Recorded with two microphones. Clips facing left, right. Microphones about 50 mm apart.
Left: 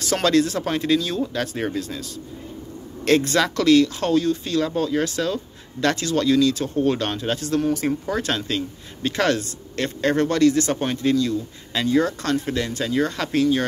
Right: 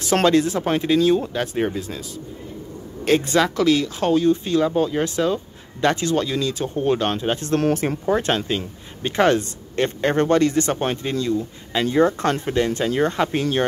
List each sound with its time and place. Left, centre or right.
0.0 s speech: right
3.1 s speech: centre; by 13.5 s right